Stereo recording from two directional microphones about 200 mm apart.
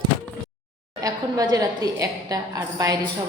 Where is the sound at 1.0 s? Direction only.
15° right (ahead or behind).